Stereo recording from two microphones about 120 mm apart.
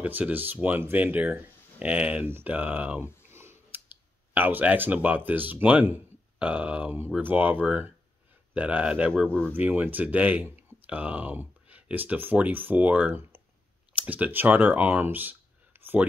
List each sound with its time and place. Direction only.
0.0 s speech: 15° right (ahead or behind)
3.2 s a sound: 20° right (ahead or behind)
4.3 s speech: 15° right (ahead or behind)